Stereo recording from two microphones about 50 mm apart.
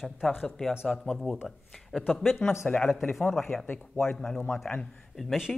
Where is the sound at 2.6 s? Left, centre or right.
Centre.